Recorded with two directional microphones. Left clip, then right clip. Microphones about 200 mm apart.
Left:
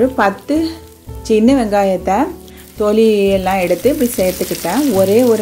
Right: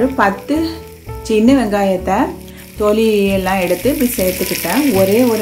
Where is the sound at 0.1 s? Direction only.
30° left (ahead or behind).